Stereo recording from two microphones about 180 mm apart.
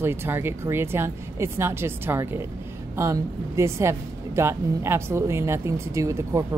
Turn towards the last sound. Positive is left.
turn(degrees=-15)  # may be behind; listen again after turning